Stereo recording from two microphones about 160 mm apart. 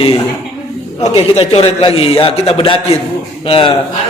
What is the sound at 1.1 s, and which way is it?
A man's voice, 35° left (ahead or behind).